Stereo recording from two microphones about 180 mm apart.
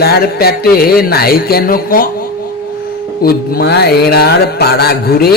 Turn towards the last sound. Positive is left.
turn(degrees=60)  # may be behind; listen again after turning